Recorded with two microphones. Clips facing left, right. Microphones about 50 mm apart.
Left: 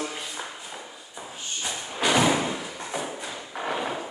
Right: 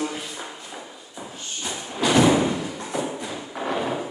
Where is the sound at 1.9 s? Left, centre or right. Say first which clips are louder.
Right 3 dB; centre.